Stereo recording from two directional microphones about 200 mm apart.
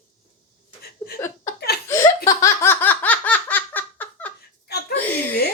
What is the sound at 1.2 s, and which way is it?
Chuckle, 15° left (ahead or behind).